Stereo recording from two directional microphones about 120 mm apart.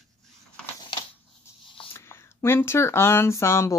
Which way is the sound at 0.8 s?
35° left (ahead or behind).